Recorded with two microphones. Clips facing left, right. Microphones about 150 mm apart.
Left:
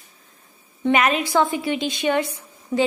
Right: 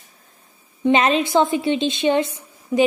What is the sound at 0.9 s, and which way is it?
A woman's voice, 25° right (ahead or behind).